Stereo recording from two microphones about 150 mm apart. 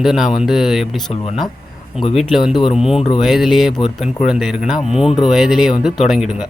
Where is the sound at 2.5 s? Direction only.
35° left (ahead or behind).